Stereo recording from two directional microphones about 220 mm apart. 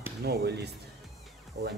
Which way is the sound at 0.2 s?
50° right (ahead or behind).